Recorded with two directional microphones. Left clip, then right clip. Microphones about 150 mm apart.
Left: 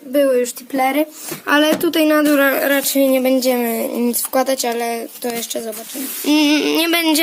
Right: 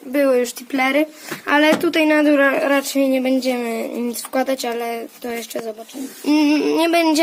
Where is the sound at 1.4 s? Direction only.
25° left (ahead or behind).